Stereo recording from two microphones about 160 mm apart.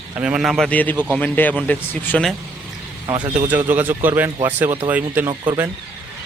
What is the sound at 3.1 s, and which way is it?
Speech, 30° right (ahead or behind).